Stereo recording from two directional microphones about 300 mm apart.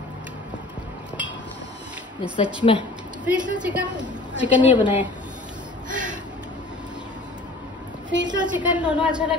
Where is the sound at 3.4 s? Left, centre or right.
Centre.